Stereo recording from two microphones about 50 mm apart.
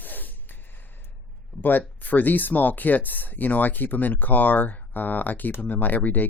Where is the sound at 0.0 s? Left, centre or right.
Left.